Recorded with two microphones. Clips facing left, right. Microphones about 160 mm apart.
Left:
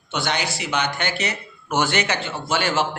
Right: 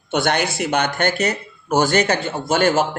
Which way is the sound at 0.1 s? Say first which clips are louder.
Right 6 dB; 55° right (ahead or behind).